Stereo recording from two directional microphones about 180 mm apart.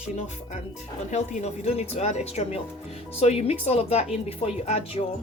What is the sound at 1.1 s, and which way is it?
Speech, 40° left (ahead or behind).